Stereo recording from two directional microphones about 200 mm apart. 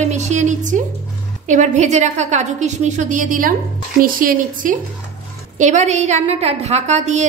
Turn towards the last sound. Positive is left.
turn(degrees=-35)  # may be behind; listen again after turning